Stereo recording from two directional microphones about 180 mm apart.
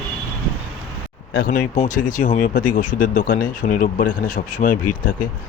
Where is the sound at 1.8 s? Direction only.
45° left (ahead or behind).